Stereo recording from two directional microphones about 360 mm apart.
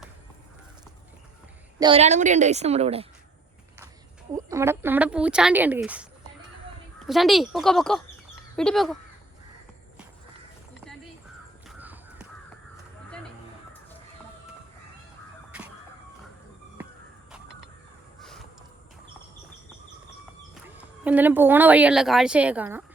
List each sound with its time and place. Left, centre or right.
1.8 s a woman's voice: centre
4.4 s speech: centre
11.7 s crow: centre
18.2 s crow: centre
20.7 s a woman's voice: centre